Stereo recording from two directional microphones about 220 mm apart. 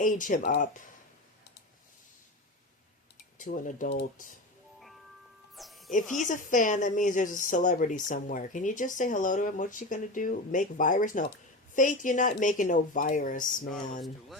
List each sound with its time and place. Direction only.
0.0 s speech: 35° left (ahead or behind)
3.3 s speech: 35° left (ahead or behind)
5.5 s music: centre (ahead or behind)
5.9 s speech: 35° left (ahead or behind)